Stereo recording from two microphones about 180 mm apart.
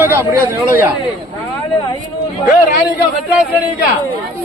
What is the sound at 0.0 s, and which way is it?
Speech, 15° right (ahead or behind).